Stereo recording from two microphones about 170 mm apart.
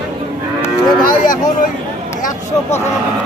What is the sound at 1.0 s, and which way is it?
Speech, 55° left (ahead or behind).